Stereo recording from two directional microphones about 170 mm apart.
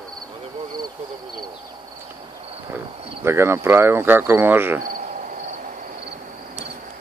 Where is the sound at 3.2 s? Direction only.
15° right (ahead or behind).